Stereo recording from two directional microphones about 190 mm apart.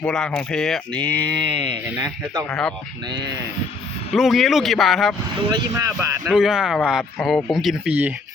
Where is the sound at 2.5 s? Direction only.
5° left (ahead or behind).